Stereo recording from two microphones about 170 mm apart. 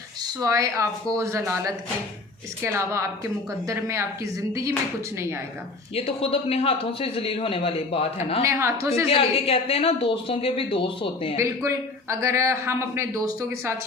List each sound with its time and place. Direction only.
0.3 s a man's voice: 20° right (ahead or behind)
5.9 s speech: 35° left (ahead or behind)
8.4 s a man's voice: 15° right (ahead or behind)
9.0 s speech: 35° left (ahead or behind)
11.3 s a man's voice: 15° right (ahead or behind)